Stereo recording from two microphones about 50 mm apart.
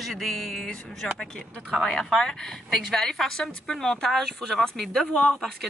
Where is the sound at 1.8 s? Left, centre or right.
Centre.